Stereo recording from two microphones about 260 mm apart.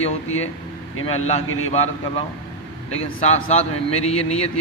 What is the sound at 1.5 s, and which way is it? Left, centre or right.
Speech, left.